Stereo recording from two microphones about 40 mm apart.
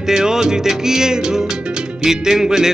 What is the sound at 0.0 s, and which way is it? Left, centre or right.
Music, centre.